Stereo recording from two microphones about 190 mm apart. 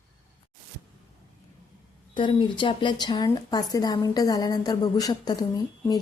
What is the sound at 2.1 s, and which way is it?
A woman's voice, 25° left (ahead or behind).